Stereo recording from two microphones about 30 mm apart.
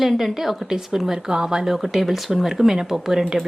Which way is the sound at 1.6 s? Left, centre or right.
Centre.